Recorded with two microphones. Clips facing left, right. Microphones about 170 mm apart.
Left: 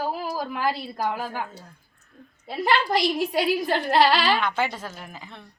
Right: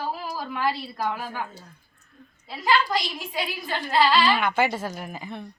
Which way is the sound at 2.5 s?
60° left (ahead or behind).